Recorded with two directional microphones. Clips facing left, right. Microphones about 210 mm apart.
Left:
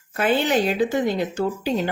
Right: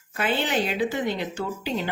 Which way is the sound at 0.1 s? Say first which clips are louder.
Left 5 dB; 45° left (ahead or behind).